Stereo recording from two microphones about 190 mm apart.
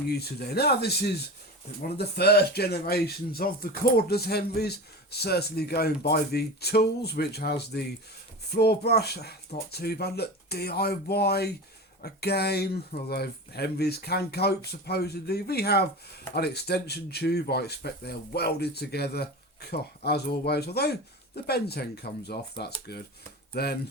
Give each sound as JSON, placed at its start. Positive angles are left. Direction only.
{"t": 0.1, "sound": "speech", "side_deg": 55}